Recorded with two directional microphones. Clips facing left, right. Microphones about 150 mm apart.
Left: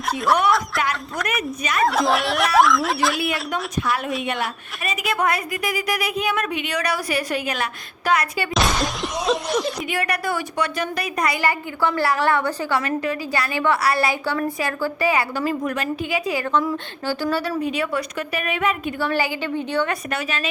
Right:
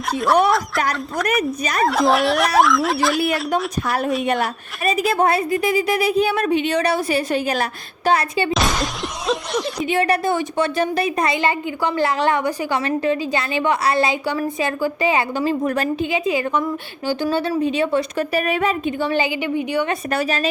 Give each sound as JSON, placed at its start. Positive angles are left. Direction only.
{"t": 0.4, "sound": "speech", "side_deg": 0}
{"t": 1.4, "sound": "a woman's voice", "side_deg": -40}
{"t": 1.8, "sound": "speech", "side_deg": 0}
{"t": 4.9, "sound": "speech", "side_deg": -30}
{"t": 8.5, "sound": "a sound", "side_deg": 0}
{"t": 9.9, "sound": "speech", "side_deg": -25}
{"t": 16.1, "sound": "speech", "side_deg": -20}
{"t": 17.6, "sound": "a woman's voice", "side_deg": -25}
{"t": 18.9, "sound": "a woman's voice", "side_deg": -20}
{"t": 20.1, "sound": "a woman's voice", "side_deg": -35}